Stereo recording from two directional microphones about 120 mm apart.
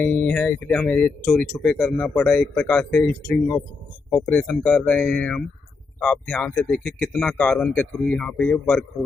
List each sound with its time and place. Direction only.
0.0 s speech: 10° left (ahead or behind)